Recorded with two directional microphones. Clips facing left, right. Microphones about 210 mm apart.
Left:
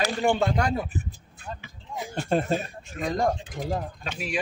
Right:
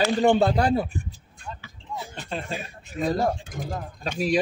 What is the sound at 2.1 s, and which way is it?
Speech, 45° left (ahead or behind).